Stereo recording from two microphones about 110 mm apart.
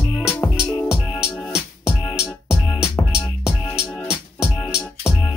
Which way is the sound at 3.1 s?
5° right (ahead or behind).